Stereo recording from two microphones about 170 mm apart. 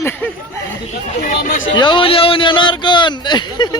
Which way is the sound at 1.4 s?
55° left (ahead or behind).